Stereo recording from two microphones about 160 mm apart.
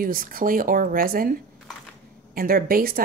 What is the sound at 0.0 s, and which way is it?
Speech, 60° right (ahead or behind).